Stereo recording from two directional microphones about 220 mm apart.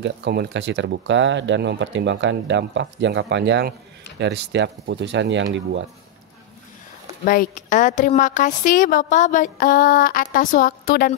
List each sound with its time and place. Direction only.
0.0 s speech: 50° right (ahead or behind)
7.2 s a woman's voice: 35° left (ahead or behind)